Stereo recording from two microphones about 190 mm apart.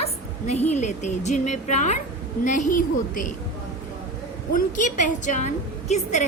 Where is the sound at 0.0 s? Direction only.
35° left (ahead or behind).